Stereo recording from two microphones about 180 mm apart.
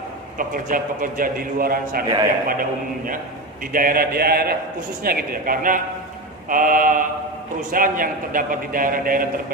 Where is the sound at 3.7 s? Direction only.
55° right (ahead or behind).